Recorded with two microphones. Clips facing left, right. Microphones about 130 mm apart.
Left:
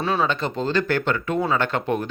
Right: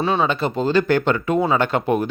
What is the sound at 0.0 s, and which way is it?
Speech, centre (ahead or behind).